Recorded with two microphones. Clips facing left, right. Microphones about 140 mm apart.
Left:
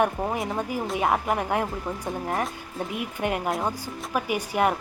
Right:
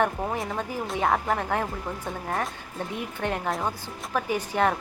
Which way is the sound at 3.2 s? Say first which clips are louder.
Left 2 dB; 10° left (ahead or behind).